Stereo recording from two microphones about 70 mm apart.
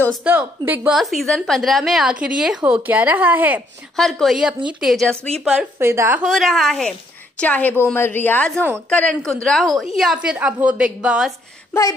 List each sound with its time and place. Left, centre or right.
0.2 s a woman's voice: right
0.9 s a woman's voice: centre
2.1 s a woman's voice: centre
3.9 s a woman's voice: centre
4.4 s a woman's voice: centre
5.0 s a woman's voice: centre
5.4 s a woman's voice: centre
5.8 s a woman's voice: right
6.2 s a woman's voice: centre
7.3 s a woman's voice: left
8.7 s a woman's voice: centre
9.8 s a woman's voice: centre
10.1 s a woman's voice: centre